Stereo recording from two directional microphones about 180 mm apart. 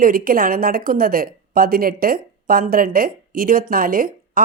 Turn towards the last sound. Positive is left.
turn(degrees=-50)  # may be behind; listen again after turning